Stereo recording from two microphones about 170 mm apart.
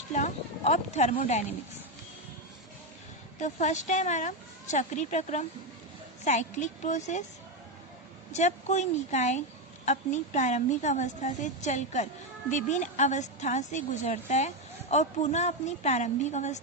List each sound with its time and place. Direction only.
0.1 s a sound: 45° left (ahead or behind)
1.2 s a woman's voice: 45° left (ahead or behind)
3.4 s a woman's voice: 45° left (ahead or behind)
8.3 s a woman's voice: 45° left (ahead or behind)